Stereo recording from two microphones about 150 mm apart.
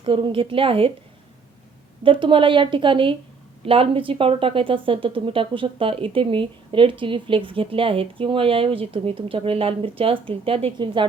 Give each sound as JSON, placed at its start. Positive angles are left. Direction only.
{"t": 0.0, "sound": "a woman's voice", "side_deg": -35}
{"t": 2.0, "sound": "a woman's voice", "side_deg": -35}